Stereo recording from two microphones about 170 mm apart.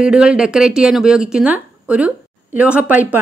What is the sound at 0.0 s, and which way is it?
A woman's voice, 5° right (ahead or behind).